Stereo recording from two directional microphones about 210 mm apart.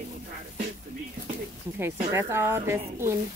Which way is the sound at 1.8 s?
10° right (ahead or behind).